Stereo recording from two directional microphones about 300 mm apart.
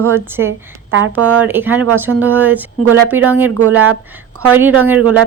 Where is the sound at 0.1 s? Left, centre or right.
Centre.